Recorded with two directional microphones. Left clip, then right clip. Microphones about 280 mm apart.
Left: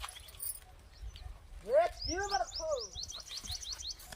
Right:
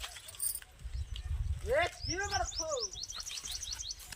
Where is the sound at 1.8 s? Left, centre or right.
Left.